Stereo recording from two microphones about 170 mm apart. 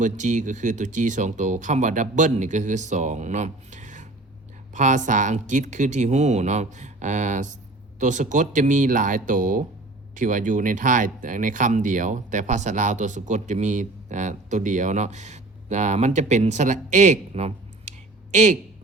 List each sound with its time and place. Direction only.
0.0 s speech: 45° right (ahead or behind)